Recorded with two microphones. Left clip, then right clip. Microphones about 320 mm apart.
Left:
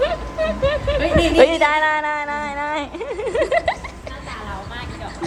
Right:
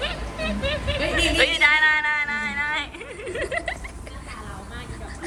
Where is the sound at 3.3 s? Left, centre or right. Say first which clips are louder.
Left 9 dB; centre.